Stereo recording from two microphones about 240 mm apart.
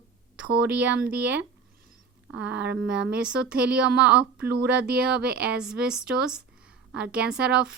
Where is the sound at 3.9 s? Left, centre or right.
Right.